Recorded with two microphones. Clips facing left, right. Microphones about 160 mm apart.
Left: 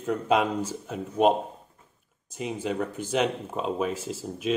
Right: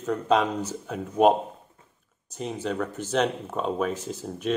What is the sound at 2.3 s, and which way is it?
Speech, 10° left (ahead or behind).